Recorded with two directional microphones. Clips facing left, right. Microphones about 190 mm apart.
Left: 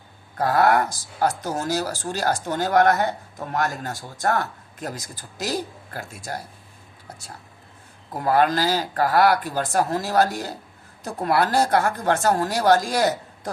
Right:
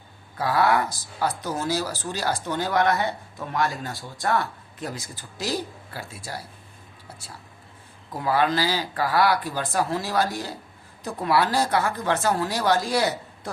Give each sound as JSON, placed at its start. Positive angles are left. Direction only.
{"t": 0.3, "sound": "speech", "side_deg": 45}
{"t": 8.1, "sound": "speech", "side_deg": 50}